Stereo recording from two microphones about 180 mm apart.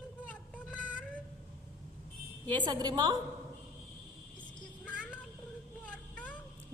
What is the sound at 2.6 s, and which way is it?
Speech, 25° right (ahead or behind).